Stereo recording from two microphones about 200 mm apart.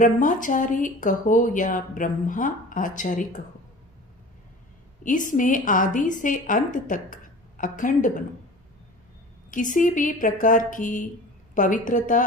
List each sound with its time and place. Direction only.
0.0 s speech: 40° left (ahead or behind)
5.0 s speech: 40° left (ahead or behind)
9.5 s speech: 40° left (ahead or behind)